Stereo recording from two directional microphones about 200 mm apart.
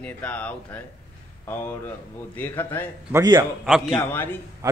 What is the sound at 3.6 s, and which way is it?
Speech, centre (ahead or behind).